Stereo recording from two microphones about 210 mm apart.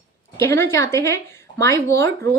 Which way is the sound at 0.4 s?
10° left (ahead or behind).